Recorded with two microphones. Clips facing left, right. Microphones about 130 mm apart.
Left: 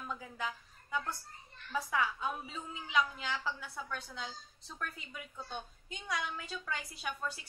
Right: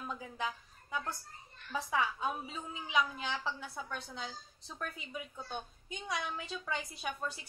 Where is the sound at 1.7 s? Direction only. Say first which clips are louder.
Even; 20° right (ahead or behind).